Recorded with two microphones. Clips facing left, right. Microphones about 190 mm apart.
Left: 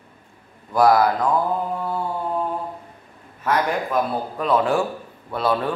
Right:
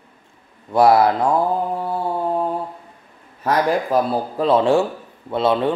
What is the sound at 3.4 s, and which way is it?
Speech, 35° right (ahead or behind).